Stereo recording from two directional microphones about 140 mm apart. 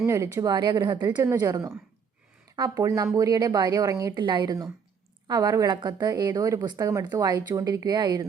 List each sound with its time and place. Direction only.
0.0 s a woman's voice: 20° right (ahead or behind)
0.5 s speech: 30° right (ahead or behind)
1.1 s a woman's voice: 20° right (ahead or behind)